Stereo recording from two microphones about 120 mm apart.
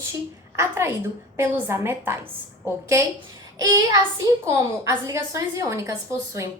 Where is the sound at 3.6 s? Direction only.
25° right (ahead or behind).